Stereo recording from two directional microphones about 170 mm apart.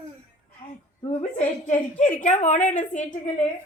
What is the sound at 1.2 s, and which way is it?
A woman's voice, 45° left (ahead or behind).